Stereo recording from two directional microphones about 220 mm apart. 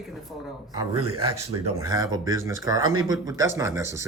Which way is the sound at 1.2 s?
90° right.